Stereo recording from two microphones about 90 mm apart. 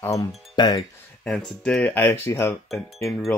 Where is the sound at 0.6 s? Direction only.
55° left (ahead or behind).